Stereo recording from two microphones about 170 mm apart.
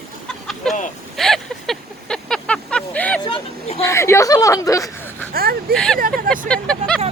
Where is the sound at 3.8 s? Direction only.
15° left (ahead or behind).